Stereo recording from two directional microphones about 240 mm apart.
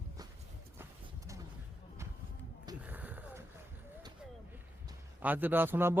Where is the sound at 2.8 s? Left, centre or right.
Centre.